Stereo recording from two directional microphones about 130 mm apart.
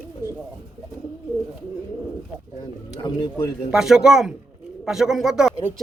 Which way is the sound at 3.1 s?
35° left (ahead or behind).